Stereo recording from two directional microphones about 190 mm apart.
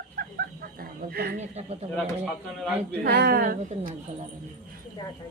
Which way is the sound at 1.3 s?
35° right (ahead or behind).